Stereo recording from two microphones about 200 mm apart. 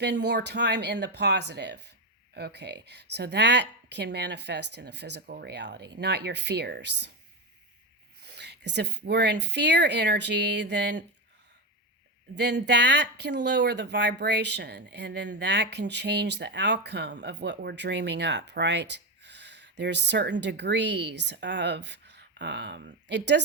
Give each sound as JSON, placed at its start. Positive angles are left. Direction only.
{"t": 0.0, "sound": "speech", "side_deg": -60}
{"t": 8.2, "sound": "speech", "side_deg": -55}
{"t": 12.3, "sound": "speech", "side_deg": -60}